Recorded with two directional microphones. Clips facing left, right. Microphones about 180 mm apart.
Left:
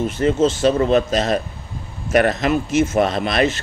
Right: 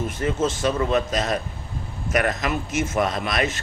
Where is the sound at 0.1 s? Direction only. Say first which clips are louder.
Left 7 dB; 30° left (ahead or behind).